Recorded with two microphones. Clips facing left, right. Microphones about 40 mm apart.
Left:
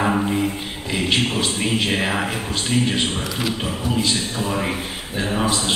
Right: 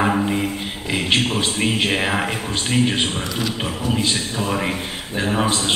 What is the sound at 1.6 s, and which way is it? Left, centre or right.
A man's voice, centre.